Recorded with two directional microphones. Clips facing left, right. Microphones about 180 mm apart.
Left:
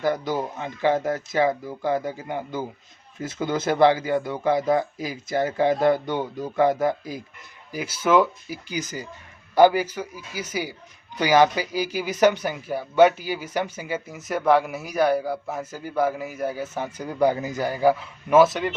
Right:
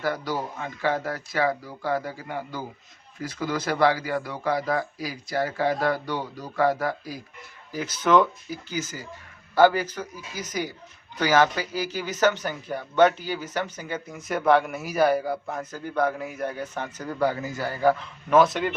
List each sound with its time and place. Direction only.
0.0 s speech: 20° left (ahead or behind)
7.7 s speech: 10° left (ahead or behind)